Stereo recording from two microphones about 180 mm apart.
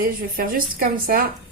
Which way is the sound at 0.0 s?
55° right (ahead or behind).